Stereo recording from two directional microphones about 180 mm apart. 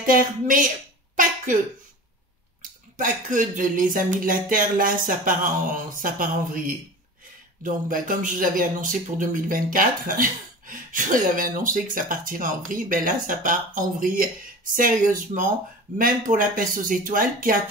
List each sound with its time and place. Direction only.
0.0 s speech: 50° right (ahead or behind)
3.0 s speech: 45° right (ahead or behind)
7.6 s speech: 45° right (ahead or behind)